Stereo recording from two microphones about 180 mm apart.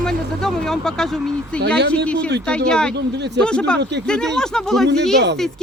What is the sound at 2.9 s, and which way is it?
Speech, 70° right (ahead or behind).